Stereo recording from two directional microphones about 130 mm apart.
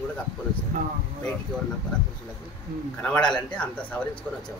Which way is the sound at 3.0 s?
10° left (ahead or behind).